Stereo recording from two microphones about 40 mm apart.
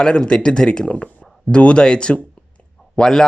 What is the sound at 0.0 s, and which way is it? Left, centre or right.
A man's voice, left.